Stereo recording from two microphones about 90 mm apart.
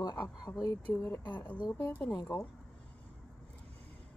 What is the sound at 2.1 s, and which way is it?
Speech, 40° left (ahead or behind).